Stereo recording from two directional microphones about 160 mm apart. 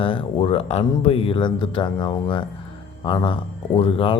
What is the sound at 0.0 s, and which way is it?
Speech, 35° left (ahead or behind).